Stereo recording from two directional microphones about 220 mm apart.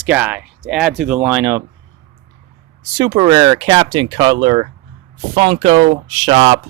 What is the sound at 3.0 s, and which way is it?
Speech, 20° right (ahead or behind).